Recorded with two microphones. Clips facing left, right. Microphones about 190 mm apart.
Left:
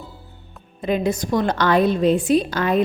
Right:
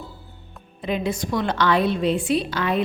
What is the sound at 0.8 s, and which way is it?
A woman's voice, 45° left (ahead or behind).